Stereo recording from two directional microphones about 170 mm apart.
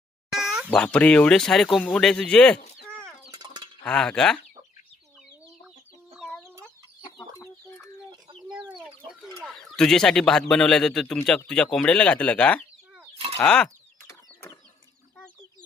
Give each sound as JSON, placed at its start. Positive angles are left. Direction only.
{"t": 0.3, "sound": "plop", "side_deg": -5}
{"t": 0.8, "sound": "speech", "side_deg": 5}
{"t": 3.3, "sound": "a sound", "side_deg": -25}
{"t": 3.8, "sound": "speech", "side_deg": 5}
{"t": 6.1, "sound": "chicken", "side_deg": 5}
{"t": 7.0, "sound": "chicken", "side_deg": 25}
{"t": 9.4, "sound": "speech", "side_deg": 0}